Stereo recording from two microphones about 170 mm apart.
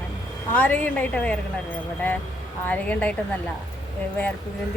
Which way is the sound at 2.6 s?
10° left (ahead or behind).